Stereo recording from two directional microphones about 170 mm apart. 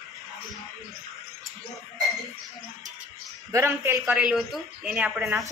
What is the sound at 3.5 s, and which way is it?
A man's voice, 15° right (ahead or behind).